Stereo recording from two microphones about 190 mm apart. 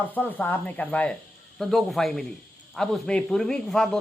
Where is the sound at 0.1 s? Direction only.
10° left (ahead or behind).